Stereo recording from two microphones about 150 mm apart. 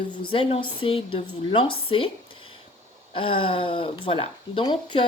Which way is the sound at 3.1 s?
35° left (ahead or behind).